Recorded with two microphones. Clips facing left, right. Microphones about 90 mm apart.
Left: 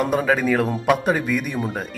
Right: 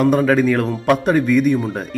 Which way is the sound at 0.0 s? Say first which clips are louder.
Right 5 dB; 5° left (ahead or behind).